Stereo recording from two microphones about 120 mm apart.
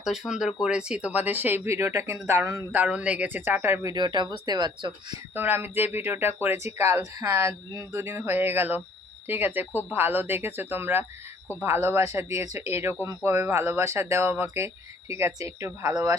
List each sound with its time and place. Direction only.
0.0 s speech: 5° right (ahead or behind); by 3.9 s 20° right (ahead or behind)
3.9 s speech: 35° right (ahead or behind)
5.3 s speech: 15° right (ahead or behind)